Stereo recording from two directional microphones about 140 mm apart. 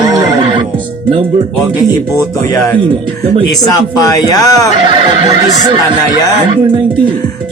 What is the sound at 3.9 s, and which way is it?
Speech, 25° left (ahead or behind).